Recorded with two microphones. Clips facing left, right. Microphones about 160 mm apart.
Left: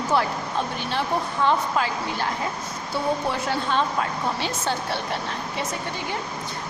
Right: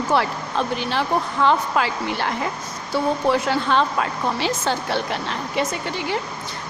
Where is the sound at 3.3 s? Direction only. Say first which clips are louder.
Right 6 dB; 90° right.